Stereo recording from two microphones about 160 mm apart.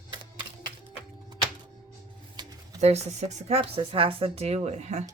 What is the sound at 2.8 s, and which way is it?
Speech, 45° right (ahead or behind).